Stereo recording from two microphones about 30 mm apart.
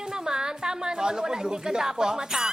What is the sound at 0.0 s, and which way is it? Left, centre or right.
A woman's voice, centre.